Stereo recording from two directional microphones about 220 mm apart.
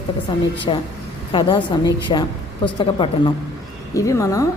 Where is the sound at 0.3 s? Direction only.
20° left (ahead or behind).